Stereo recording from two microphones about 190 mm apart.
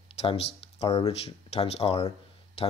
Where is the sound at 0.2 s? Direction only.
30° left (ahead or behind).